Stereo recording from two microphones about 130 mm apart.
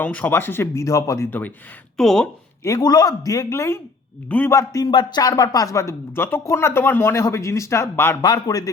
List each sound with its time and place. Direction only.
0.0 s speech: 10° left (ahead or behind)
2.0 s speech: 5° left (ahead or behind)
2.6 s speech: 25° left (ahead or behind); by 4.5 s 10° left (ahead or behind)
4.5 s speech: 25° left (ahead or behind)
8.2 s speech: 30° left (ahead or behind)